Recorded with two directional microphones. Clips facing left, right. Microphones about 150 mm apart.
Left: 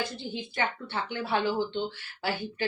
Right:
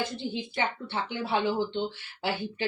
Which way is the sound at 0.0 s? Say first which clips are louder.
Right 2 dB; 20° right (ahead or behind).